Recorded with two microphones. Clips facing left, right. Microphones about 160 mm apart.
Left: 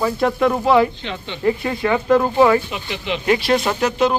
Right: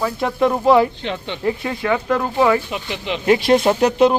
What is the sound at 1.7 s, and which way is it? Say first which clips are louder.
Speech: left 5 dB; 5° left (ahead or behind).